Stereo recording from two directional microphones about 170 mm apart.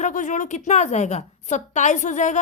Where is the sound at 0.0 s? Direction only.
45° left (ahead or behind).